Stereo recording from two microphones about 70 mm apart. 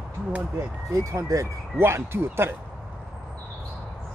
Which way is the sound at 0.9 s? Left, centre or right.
Right.